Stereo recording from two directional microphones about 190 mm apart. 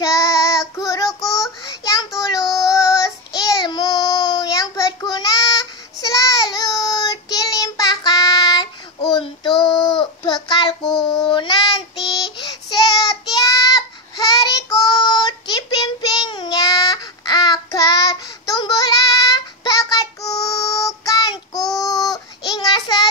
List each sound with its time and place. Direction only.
0.0 s child singing: 15° left (ahead or behind)